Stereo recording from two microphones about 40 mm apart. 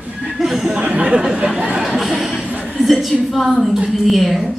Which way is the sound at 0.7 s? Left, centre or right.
Right.